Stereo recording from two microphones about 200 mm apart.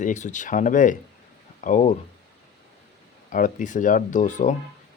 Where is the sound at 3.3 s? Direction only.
40° left (ahead or behind).